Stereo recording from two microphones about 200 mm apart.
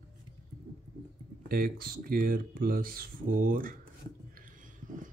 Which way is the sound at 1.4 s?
50° right (ahead or behind).